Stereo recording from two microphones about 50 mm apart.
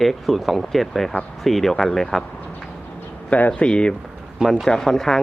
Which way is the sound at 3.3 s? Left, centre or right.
Left.